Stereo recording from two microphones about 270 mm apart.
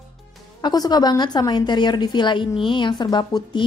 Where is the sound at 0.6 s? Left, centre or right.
Centre.